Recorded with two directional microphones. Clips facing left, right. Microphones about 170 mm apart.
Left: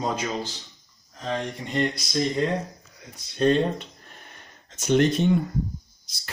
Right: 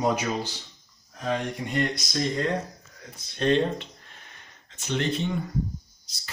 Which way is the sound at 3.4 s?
45° left (ahead or behind).